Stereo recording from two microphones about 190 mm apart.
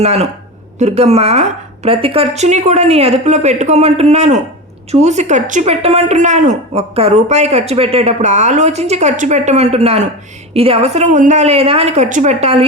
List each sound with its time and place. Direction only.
0.0 s speech: 35° right (ahead or behind)